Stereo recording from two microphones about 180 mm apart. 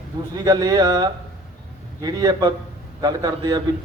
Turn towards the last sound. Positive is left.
turn(degrees=-20)  # may be behind; listen again after turning